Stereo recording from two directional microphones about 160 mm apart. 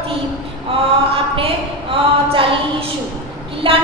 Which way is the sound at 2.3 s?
35° right (ahead or behind).